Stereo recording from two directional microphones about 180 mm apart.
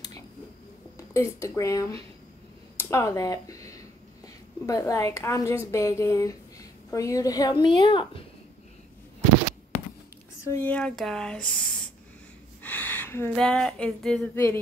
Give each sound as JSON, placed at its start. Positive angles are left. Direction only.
{"t": 0.9, "sound": "a woman's voice", "side_deg": 15}
{"t": 10.5, "sound": "speech", "side_deg": 10}
{"t": 12.6, "sound": "a sound", "side_deg": 10}
{"t": 13.4, "sound": "speech", "side_deg": 5}